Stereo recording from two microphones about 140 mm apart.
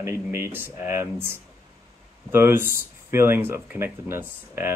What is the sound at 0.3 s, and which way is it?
Speech, 15° right (ahead or behind).